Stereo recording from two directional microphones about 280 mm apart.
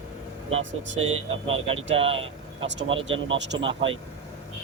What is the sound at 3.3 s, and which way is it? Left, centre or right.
Speech, right.